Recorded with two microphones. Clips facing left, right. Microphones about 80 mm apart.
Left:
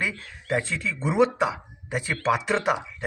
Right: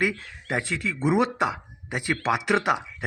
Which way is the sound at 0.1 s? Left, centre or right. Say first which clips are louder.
Left 2 dB; right.